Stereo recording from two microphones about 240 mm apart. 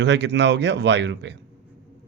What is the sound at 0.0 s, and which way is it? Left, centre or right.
Speech, right.